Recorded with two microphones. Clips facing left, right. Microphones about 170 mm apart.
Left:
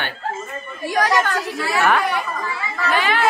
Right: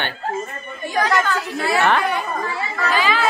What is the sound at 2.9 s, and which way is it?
Speech, 60° left (ahead or behind).